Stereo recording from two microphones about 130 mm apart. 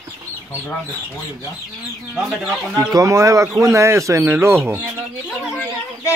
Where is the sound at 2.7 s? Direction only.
25° right (ahead or behind).